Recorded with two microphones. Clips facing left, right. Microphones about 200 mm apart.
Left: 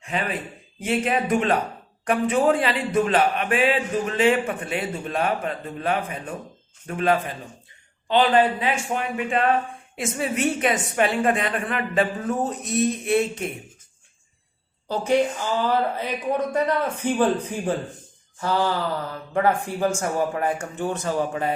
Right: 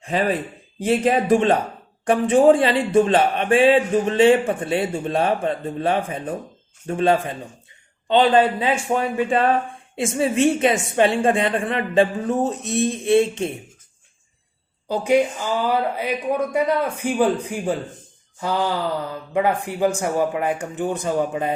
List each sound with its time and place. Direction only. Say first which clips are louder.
0.0 s a man's voice: right 6 dB; 35° right (ahead or behind)
14.8 s speech: right 3 dB; 10° right (ahead or behind)
18.3 s speech: right 1 dB; 15° right (ahead or behind)